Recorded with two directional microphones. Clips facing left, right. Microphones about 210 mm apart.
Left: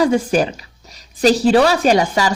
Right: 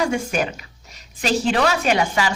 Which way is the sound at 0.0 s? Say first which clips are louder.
Left 7 dB; 35° left (ahead or behind).